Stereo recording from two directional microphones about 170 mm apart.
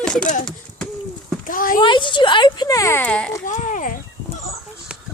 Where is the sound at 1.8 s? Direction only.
25° left (ahead or behind); by 3.3 s 5° left (ahead or behind).